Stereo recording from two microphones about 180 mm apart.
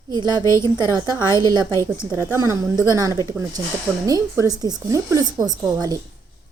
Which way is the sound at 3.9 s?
10° right (ahead or behind).